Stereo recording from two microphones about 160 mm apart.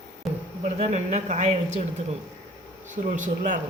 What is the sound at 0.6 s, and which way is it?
Speech, 45° right (ahead or behind).